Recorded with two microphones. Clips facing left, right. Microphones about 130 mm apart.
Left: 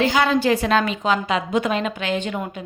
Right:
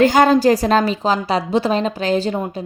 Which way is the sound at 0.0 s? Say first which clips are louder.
Right 6 dB; 45° right (ahead or behind).